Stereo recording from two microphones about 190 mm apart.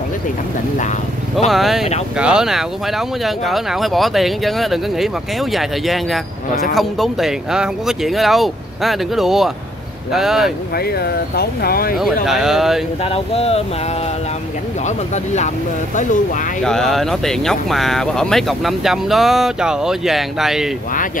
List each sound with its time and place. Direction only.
1.5 s speech: centre (ahead or behind)
10.8 s speech: 55° left (ahead or behind)
12.0 s speech: centre (ahead or behind)
13.0 s speech: 30° left (ahead or behind)
16.6 s speech: centre (ahead or behind)